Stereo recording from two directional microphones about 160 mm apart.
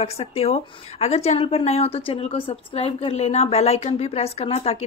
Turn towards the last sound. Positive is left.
turn(degrees=40)  # may be behind; listen again after turning